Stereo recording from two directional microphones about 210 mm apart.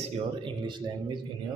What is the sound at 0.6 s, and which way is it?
Speech, 20° right (ahead or behind).